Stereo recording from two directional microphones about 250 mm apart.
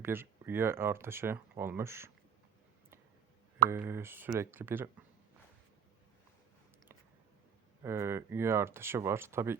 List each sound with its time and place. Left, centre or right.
0.0 s speech: centre
3.7 s speech: centre
7.8 s speech: centre